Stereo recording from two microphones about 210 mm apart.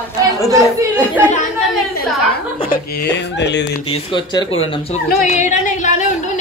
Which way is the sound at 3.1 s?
55° left (ahead or behind).